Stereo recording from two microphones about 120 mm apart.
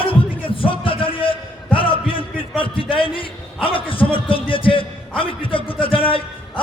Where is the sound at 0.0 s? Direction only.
45° left (ahead or behind).